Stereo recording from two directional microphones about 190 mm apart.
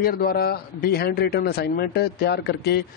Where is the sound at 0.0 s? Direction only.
50° left (ahead or behind).